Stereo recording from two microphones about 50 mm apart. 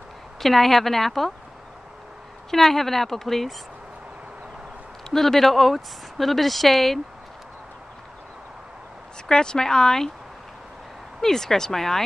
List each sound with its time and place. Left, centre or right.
0.4 s speech: centre
2.5 s a woman's voice: centre
5.1 s speech: centre
9.3 s a woman's voice: centre
11.1 s a woman's voice: centre